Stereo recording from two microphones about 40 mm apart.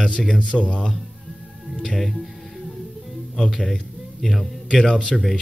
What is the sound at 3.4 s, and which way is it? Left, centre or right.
Speech, centre.